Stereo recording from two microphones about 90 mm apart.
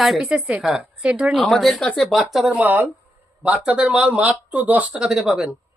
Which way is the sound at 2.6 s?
20° right (ahead or behind).